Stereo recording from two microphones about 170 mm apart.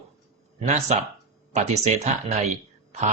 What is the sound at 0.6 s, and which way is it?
Speech, 40° right (ahead or behind).